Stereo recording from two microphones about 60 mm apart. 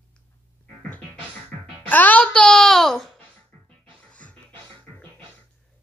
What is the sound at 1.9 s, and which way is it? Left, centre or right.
Music, left.